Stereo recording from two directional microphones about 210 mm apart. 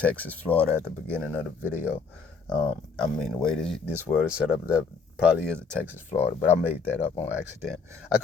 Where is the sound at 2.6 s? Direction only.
5° left (ahead or behind).